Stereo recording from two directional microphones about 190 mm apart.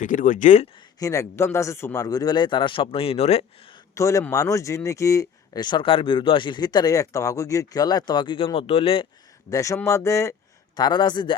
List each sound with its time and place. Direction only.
0.0 s speech: 45° left (ahead or behind)
0.9 s speech: 15° left (ahead or behind); by 3.8 s 35° left (ahead or behind)
3.9 s speech: 15° left (ahead or behind)
9.5 s speech: 15° left (ahead or behind)